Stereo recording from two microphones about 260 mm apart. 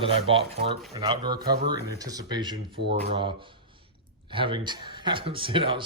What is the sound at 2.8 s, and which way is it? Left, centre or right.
Speech, right.